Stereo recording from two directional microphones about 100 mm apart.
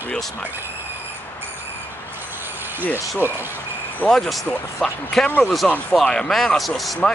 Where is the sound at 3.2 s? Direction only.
20° right (ahead or behind).